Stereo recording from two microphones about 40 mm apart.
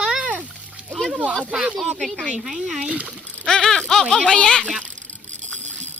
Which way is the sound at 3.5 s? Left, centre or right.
Centre.